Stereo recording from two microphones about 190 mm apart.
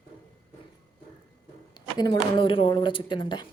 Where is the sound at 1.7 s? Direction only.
20° left (ahead or behind).